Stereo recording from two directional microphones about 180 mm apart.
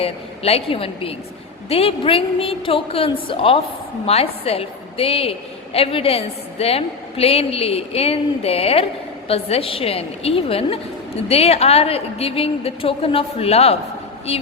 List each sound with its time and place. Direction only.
0.0 s a woman's voice: 35° left (ahead or behind)